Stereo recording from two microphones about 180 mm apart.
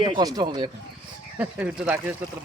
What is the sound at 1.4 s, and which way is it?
Speech, 5° right (ahead or behind).